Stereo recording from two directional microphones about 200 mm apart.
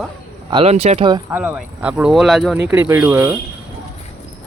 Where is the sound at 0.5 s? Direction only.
30° right (ahead or behind).